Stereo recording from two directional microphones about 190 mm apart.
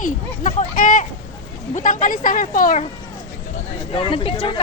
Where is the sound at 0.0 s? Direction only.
45° left (ahead or behind).